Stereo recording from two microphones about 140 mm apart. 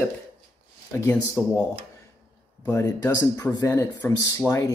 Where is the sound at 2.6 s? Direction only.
20° left (ahead or behind).